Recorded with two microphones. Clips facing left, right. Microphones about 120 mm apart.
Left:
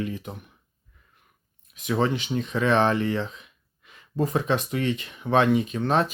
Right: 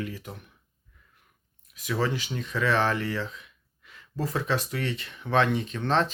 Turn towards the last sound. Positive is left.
turn(degrees=10)  # may be behind; listen again after turning